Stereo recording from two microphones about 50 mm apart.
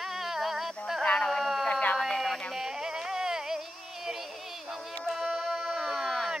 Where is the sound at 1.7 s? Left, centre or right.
Left.